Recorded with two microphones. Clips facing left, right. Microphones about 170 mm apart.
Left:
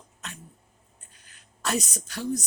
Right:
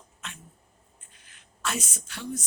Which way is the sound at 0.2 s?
40° left (ahead or behind).